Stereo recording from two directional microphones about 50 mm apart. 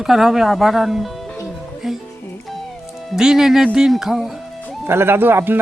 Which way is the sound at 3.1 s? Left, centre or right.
Centre.